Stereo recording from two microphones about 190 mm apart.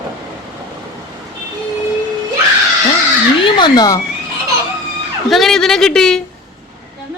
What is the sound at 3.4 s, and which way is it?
Speech, 25° left (ahead or behind).